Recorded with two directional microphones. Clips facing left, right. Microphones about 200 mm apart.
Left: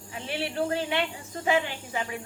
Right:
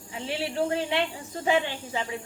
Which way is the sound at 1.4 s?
30° right (ahead or behind).